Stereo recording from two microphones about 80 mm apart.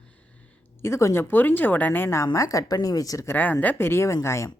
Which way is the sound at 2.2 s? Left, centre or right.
Left.